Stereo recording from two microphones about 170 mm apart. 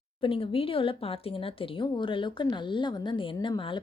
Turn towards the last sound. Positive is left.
turn(degrees=30)  # may be behind; listen again after turning